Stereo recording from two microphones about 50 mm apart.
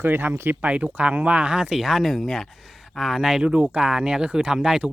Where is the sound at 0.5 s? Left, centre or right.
Right.